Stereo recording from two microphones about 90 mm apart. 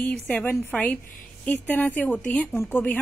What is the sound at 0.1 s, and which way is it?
Speech, 10° left (ahead or behind).